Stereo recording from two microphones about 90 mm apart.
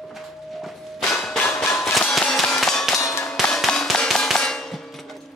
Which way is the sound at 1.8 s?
5° left (ahead or behind).